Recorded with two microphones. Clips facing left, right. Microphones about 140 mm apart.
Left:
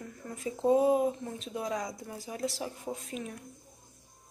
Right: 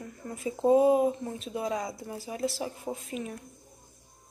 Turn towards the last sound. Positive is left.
turn(degrees=-5)  # may be behind; listen again after turning